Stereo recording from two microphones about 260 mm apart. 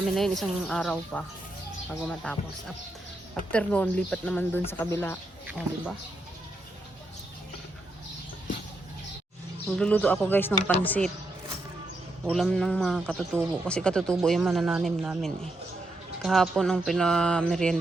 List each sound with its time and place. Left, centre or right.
0.2 s a man's voice: centre
5.5 s a man's voice: centre
9.6 s speech: centre
12.2 s a man's voice: centre